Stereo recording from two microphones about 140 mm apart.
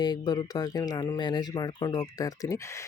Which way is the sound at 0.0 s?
30° left (ahead or behind).